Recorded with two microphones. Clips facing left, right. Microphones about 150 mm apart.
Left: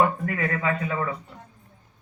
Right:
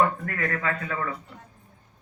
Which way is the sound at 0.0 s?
20° left (ahead or behind).